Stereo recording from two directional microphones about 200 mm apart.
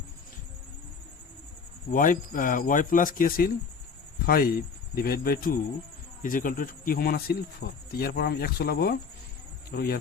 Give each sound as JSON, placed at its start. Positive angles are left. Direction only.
{"t": 1.9, "sound": "speech", "side_deg": 40}